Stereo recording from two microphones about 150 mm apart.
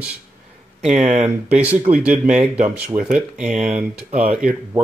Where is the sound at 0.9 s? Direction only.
50° right (ahead or behind).